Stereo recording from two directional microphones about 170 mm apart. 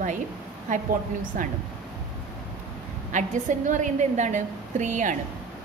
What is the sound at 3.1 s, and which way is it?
Speech, 45° right (ahead or behind).